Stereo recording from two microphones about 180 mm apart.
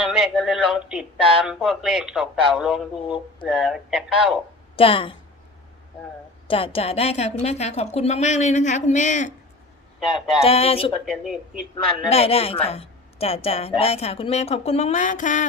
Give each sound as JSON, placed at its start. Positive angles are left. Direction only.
{"t": 0.0, "sound": "a man's voice", "side_deg": 0}
{"t": 4.8, "sound": "a woman's voice", "side_deg": 30}
{"t": 6.5, "sound": "a woman's voice", "side_deg": 30}
{"t": 10.2, "sound": "a man's voice", "side_deg": 0}
{"t": 10.4, "sound": "a woman's voice", "side_deg": 35}
{"t": 11.0, "sound": "a man's voice", "side_deg": 0}
{"t": 12.0, "sound": "a woman's voice", "side_deg": 35}